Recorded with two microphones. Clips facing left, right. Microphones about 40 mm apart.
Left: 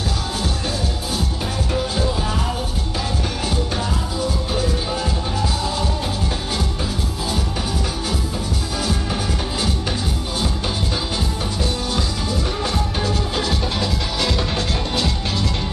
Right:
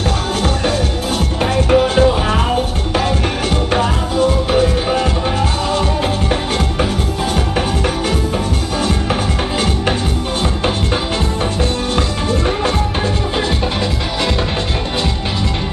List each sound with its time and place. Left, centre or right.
0.4 s music: right
3.7 s music: right
11.9 s music: right